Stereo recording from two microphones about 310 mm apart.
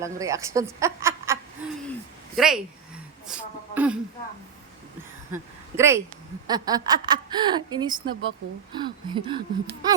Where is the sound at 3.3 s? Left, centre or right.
Centre.